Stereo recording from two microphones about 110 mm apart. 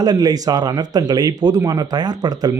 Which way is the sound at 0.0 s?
35° right (ahead or behind).